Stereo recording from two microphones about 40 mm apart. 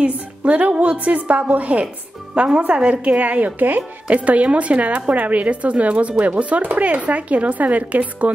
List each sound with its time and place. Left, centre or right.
0.0 s a woman's voice: right
2.3 s a woman's voice: right